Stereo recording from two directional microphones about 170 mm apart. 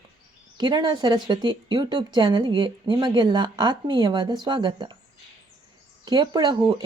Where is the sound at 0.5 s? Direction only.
25° right (ahead or behind).